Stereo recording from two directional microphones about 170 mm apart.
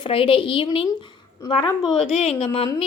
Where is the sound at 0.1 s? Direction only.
30° left (ahead or behind).